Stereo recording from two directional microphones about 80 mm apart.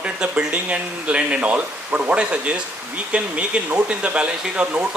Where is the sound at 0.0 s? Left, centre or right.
Centre.